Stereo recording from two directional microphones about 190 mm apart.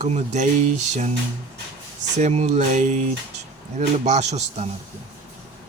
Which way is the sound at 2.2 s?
35° right (ahead or behind).